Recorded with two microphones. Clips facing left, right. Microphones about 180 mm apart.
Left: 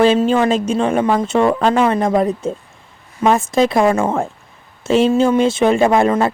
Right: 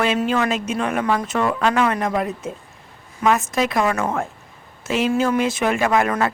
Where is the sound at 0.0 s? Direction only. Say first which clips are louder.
Left 7 dB; 30° left (ahead or behind).